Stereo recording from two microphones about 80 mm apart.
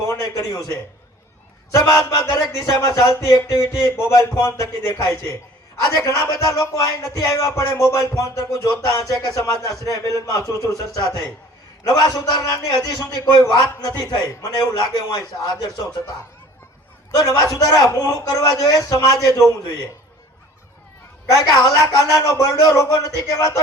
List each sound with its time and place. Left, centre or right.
0.1 s a man's voice: left
11.8 s a man's voice: left
17.2 s a man's voice: left
21.2 s a man's voice: left